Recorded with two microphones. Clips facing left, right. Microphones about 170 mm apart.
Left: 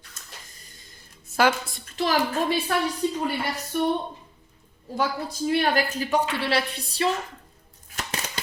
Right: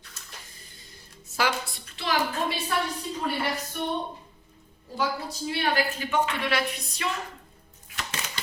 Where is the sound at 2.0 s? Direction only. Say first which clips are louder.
Left 6 dB; 45° left (ahead or behind).